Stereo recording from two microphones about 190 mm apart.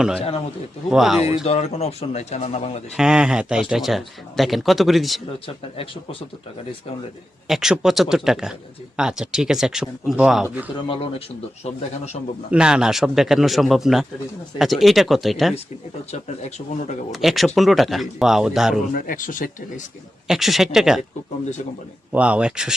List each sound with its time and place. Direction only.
0.2 s speech: 30° left (ahead or behind)
0.9 s speech: centre (ahead or behind)
1.5 s speech: 35° left (ahead or behind)
2.9 s speech: 5° right (ahead or behind)
5.5 s speech: 30° left (ahead or behind)
7.4 s speech: centre (ahead or behind)
10.8 s speech: 25° left (ahead or behind)
11.6 s speech: 35° left (ahead or behind)
12.5 s speech: 5° right (ahead or behind)
16.1 s speech: 35° left (ahead or behind)
17.1 s speech: centre (ahead or behind)
18.9 s speech: 45° left (ahead or behind)
20.2 s speech: centre (ahead or behind)
22.1 s speech: 5° right (ahead or behind)